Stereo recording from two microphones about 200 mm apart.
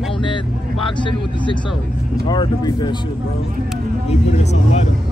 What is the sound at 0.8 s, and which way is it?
Speech, 25° left (ahead or behind).